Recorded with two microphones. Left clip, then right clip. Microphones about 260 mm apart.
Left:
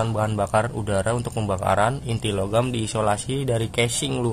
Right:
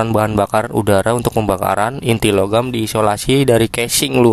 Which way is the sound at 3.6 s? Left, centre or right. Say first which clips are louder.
Right 5 dB; right.